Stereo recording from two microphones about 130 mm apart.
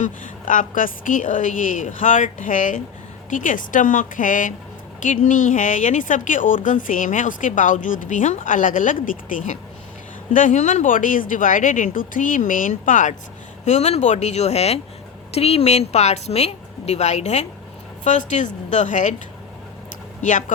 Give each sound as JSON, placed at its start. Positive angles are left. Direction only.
{"t": 0.0, "sound": "a woman's voice", "side_deg": 85}
{"t": 13.7, "sound": "a woman's voice", "side_deg": 60}